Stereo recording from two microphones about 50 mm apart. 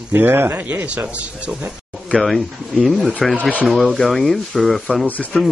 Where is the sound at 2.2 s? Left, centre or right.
Centre.